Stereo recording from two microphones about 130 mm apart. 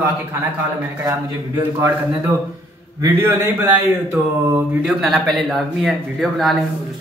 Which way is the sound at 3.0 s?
15° right (ahead or behind).